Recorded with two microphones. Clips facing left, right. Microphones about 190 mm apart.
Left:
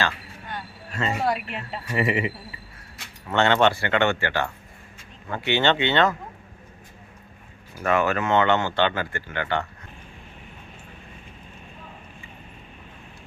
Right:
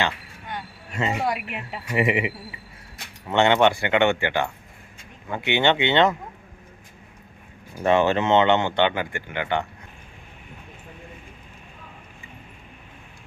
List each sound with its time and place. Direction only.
0.0 s speech: 15° right (ahead or behind)
7.9 s speech: 25° right (ahead or behind)